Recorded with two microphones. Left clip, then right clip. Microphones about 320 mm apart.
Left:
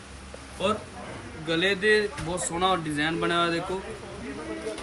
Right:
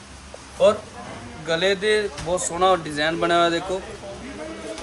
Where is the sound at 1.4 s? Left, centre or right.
Right.